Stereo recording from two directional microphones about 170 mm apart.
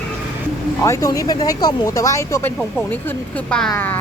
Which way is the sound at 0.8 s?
20° left (ahead or behind).